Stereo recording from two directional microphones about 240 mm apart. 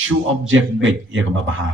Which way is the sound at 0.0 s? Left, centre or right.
Right.